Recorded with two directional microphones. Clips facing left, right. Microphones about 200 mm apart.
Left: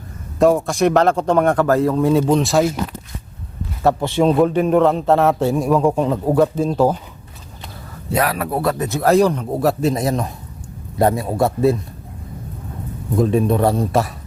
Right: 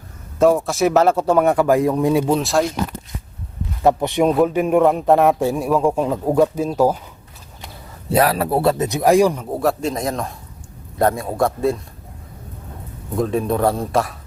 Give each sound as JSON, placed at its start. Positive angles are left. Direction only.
{"t": 0.3, "sound": "a man's voice", "side_deg": 0}
{"t": 3.8, "sound": "a man's voice", "side_deg": -15}
{"t": 8.1, "sound": "a man's voice", "side_deg": -30}
{"t": 13.1, "sound": "a man's voice", "side_deg": 0}